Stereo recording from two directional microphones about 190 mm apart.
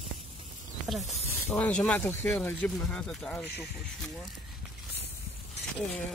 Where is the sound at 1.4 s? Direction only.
10° left (ahead or behind).